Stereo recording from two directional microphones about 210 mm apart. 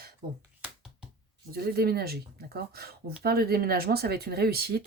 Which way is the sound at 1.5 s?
45° right (ahead or behind).